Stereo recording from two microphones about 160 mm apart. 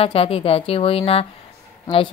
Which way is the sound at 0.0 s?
35° left (ahead or behind).